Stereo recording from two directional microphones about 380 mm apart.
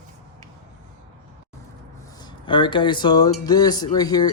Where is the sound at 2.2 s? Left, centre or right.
Centre.